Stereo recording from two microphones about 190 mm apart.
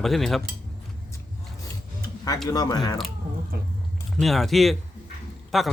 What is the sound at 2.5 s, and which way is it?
Speech, 20° left (ahead or behind).